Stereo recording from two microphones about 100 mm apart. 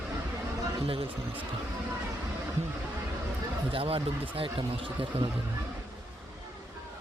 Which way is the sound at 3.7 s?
65° right (ahead or behind).